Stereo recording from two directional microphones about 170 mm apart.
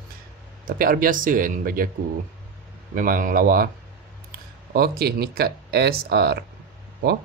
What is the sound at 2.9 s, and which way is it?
Speech, 55° right (ahead or behind).